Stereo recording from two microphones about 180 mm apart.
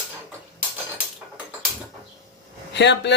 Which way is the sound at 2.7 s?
75° left (ahead or behind).